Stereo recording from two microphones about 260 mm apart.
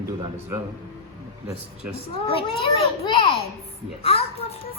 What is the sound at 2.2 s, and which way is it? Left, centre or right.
A child's voice, left.